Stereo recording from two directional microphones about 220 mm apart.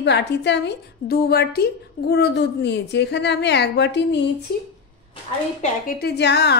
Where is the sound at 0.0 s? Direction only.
50° left (ahead or behind).